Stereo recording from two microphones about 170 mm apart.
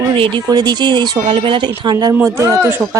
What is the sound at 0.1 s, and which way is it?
Speech, 30° right (ahead or behind).